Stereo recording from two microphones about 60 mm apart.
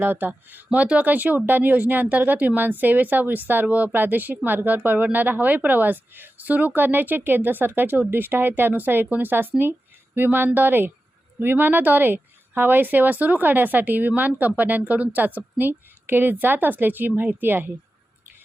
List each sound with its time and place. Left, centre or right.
0.0 s a woman's voice: right